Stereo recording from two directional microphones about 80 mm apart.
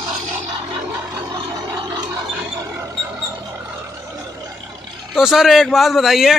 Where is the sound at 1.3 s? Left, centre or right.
Right.